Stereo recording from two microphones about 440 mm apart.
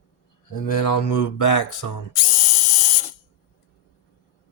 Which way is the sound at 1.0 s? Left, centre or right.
Left.